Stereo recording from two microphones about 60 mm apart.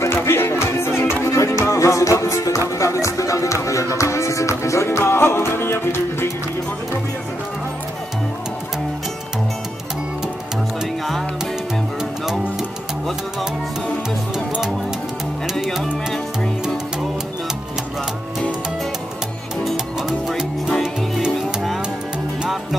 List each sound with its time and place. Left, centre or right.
0.0 s music: left
20.1 s music: centre